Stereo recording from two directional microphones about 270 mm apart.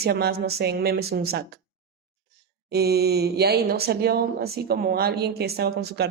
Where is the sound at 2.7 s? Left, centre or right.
Right.